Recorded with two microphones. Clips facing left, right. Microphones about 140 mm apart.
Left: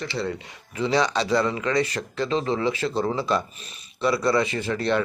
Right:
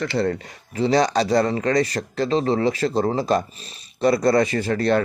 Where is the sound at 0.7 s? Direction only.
40° right (ahead or behind).